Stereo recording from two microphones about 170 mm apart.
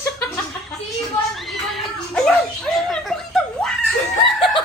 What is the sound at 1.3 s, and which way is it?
Cat, centre (ahead or behind).